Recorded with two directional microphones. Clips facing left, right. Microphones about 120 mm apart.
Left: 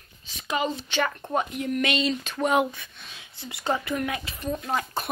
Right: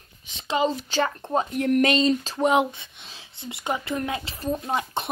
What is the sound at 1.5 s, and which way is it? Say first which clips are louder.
Speech: right 7 dB; 55° right (ahead or behind).